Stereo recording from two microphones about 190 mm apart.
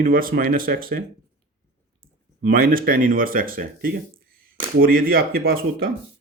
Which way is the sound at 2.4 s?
50° right (ahead or behind).